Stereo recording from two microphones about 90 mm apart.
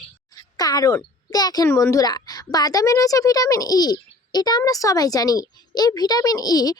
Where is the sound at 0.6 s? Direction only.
45° left (ahead or behind).